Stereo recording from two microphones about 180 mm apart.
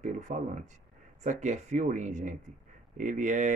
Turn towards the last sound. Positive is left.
turn(degrees=-45)  # may be behind; listen again after turning